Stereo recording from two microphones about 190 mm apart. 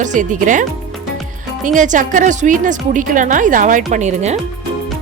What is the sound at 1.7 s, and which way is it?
A woman's voice, 40° right (ahead or behind).